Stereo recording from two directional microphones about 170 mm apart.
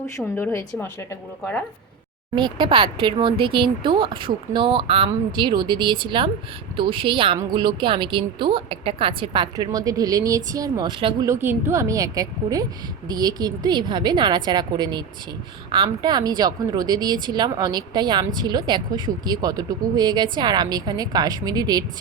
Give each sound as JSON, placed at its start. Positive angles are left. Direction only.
{"t": 0.2, "sound": "a woman's voice", "side_deg": 10}
{"t": 2.3, "sound": "a woman's voice", "side_deg": -25}